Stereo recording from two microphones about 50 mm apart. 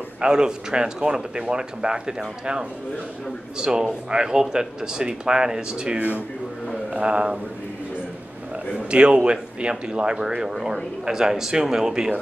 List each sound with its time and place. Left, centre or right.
0.2 s speech: centre
8.9 s speech: centre